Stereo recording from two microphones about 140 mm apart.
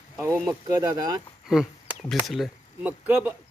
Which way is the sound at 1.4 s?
5° right (ahead or behind).